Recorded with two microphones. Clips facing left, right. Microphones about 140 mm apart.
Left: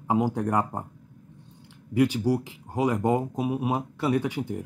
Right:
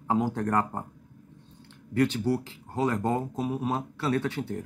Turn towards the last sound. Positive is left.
turn(degrees=10)  # may be behind; listen again after turning